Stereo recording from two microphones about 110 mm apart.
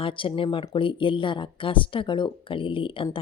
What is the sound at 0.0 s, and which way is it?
Speech, 50° left (ahead or behind).